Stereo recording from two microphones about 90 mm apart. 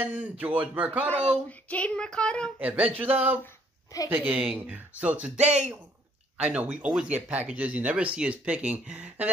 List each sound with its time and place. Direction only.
0.0 s speech: 20° right (ahead or behind)
1.0 s speech: 15° left (ahead or behind)
2.6 s speech: 15° right (ahead or behind)